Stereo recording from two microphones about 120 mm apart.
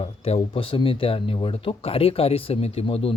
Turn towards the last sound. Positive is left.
turn(degrees=55)  # may be behind; listen again after turning